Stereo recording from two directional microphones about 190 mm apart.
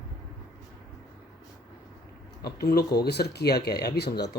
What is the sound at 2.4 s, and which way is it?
Speech, 55° left (ahead or behind).